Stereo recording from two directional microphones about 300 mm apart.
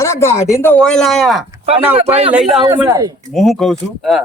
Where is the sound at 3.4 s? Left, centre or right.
Centre.